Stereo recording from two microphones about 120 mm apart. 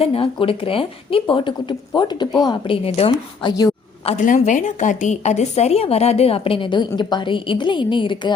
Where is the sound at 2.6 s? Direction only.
55° left (ahead or behind).